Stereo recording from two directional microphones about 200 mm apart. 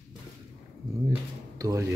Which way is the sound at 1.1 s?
15° right (ahead or behind).